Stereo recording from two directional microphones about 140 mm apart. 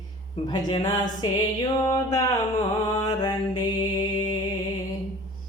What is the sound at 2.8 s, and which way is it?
Mantra, 25° left (ahead or behind).